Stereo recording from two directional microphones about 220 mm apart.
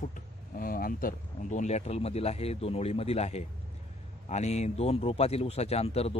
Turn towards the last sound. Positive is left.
turn(degrees=25)  # may be behind; listen again after turning